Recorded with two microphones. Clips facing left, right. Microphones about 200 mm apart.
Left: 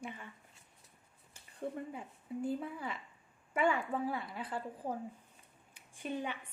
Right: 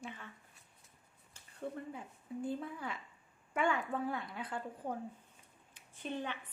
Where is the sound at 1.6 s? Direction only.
20° left (ahead or behind).